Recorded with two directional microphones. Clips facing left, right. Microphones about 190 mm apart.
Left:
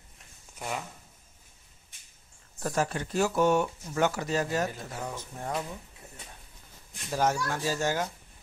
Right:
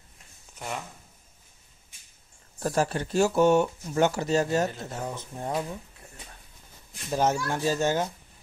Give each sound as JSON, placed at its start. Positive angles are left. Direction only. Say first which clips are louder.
{"t": 0.6, "sound": "speech", "louder": "even", "side_deg": 0}
{"t": 2.6, "sound": "speech", "louder": "right 3 dB", "side_deg": -35}
{"t": 7.1, "sound": "speech", "louder": "right 2 dB", "side_deg": -25}